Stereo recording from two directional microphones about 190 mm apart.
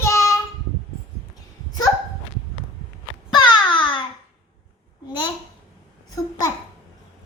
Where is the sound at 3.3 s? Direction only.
25° left (ahead or behind).